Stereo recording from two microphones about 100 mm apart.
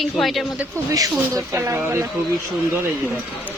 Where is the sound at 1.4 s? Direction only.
30° right (ahead or behind).